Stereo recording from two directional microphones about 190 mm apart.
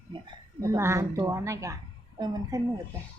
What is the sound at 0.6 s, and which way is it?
A woman's voice, 15° right (ahead or behind).